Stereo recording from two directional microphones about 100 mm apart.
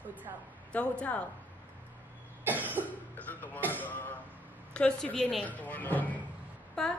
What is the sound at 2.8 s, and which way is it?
A woman's voice, 15° left (ahead or behind).